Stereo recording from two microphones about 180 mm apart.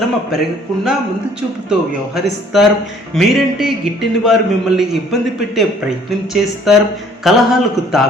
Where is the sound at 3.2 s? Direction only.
Centre (ahead or behind).